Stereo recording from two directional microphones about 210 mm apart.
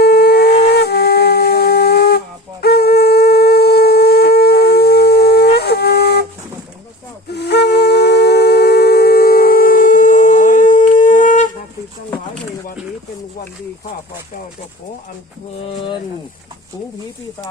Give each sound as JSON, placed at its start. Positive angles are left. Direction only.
{"t": 0.0, "sound": "wind instrument", "side_deg": 50}
{"t": 7.3, "sound": "wind instrument", "side_deg": 50}
{"t": 15.6, "sound": "a sound", "side_deg": 25}